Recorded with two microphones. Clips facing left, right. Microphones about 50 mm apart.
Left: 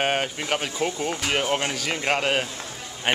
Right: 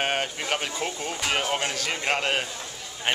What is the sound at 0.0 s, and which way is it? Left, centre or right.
Speech, centre.